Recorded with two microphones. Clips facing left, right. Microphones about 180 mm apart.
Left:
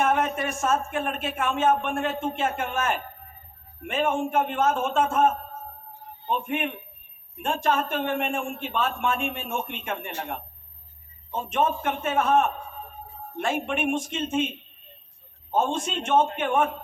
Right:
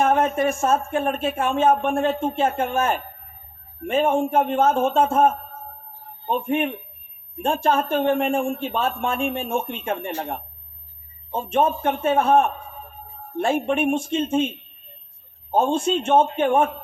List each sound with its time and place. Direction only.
0.0 s speech: 35° right (ahead or behind)
15.5 s speech: 30° right (ahead or behind)